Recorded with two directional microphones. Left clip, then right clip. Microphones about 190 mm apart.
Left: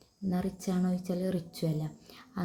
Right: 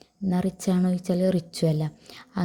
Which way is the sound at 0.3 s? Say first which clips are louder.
Right 7 dB; 40° right (ahead or behind).